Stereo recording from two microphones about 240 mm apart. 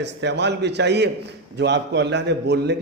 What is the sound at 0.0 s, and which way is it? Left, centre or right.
A man's voice, right.